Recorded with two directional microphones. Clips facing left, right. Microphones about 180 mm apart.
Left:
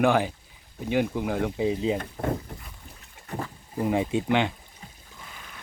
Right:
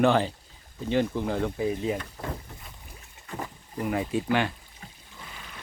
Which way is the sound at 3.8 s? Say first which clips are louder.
Left 3 dB; 25° left (ahead or behind).